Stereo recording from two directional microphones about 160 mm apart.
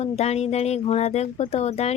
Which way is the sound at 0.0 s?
40° left (ahead or behind).